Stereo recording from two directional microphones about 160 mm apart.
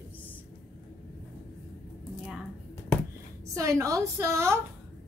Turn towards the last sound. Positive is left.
turn(degrees=-15)  # may be behind; listen again after turning